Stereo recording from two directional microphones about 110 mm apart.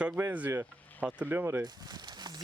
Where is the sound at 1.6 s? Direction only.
40° right (ahead or behind).